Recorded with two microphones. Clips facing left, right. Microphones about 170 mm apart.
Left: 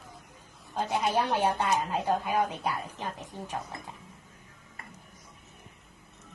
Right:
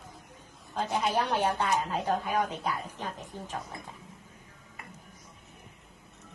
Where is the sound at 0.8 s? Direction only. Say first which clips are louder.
Left 1 dB; 50° left (ahead or behind).